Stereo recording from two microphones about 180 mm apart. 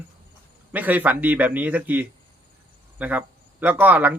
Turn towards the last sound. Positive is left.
turn(degrees=-10)  # may be behind; listen again after turning